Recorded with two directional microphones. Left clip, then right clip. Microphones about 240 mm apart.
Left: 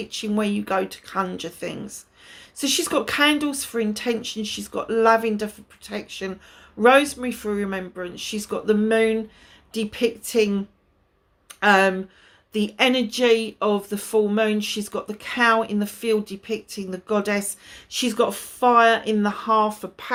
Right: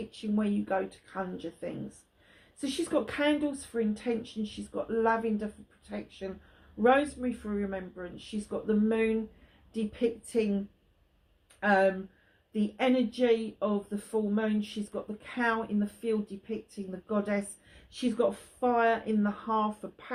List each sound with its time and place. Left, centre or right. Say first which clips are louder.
0.1 s speech: left 9 dB; left